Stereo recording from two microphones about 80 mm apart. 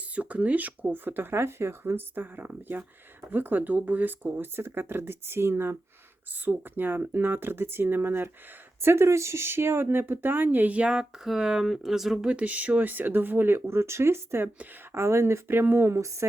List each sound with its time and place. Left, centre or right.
0.2 s speech: centre; by 16.0 s right